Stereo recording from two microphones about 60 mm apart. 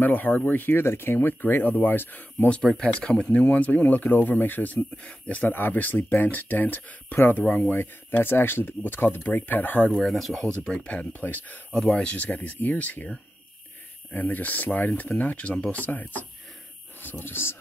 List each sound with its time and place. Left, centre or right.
0.0 s speech: left
2.8 s speech: centre
4.7 s speech: centre
7.7 s speech: left
10.0 s speech: centre; by 11.6 s left
11.7 s speech: centre
14.1 s speech: left
15.7 s speech: left
17.2 s speech: left